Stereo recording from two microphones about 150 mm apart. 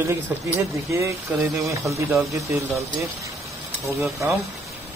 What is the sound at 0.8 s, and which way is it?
Speech, 20° right (ahead or behind).